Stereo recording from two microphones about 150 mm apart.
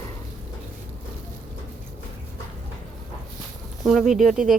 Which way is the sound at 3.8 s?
Centre (ahead or behind).